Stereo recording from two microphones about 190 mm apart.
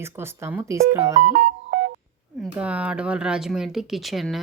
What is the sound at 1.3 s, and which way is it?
Music, 50° right (ahead or behind).